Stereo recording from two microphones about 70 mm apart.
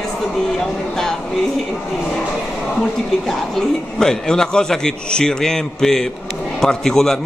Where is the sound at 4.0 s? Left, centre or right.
Centre.